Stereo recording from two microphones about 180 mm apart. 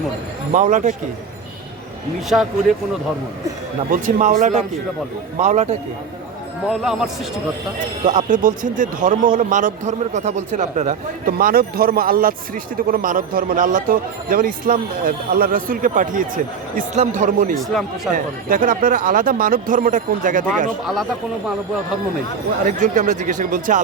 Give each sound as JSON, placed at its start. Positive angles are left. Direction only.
{"t": 0.5, "sound": "a man's voice", "side_deg": -45}
{"t": 2.3, "sound": "speech", "side_deg": 0}
{"t": 3.9, "sound": "a man's voice", "side_deg": -45}
{"t": 6.7, "sound": "speech", "side_deg": 0}
{"t": 8.0, "sound": "a man's voice", "side_deg": -45}
{"t": 17.6, "sound": "speech", "side_deg": 0}
{"t": 18.1, "sound": "a man's voice", "side_deg": -50}
{"t": 20.8, "sound": "speech", "side_deg": 0}
{"t": 22.6, "sound": "a man's voice", "side_deg": -45}